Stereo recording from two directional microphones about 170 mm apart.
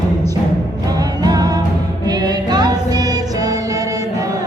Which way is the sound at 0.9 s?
20° right (ahead or behind).